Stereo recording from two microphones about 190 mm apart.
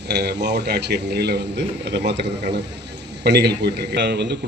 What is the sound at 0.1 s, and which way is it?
A man's voice, 60° right (ahead or behind).